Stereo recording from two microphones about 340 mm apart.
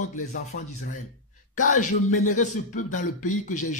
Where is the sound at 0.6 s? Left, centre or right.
Left.